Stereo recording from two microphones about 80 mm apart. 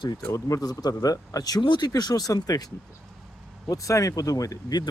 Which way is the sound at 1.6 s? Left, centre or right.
Left.